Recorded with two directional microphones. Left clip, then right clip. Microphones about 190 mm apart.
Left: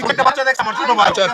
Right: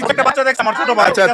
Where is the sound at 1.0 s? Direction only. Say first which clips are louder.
Right 3 dB; 30° right (ahead or behind).